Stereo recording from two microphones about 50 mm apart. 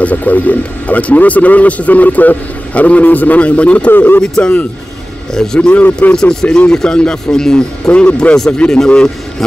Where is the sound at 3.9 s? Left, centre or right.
Left.